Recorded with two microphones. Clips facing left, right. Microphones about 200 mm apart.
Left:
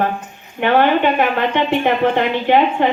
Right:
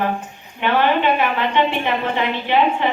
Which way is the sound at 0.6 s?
50° left (ahead or behind).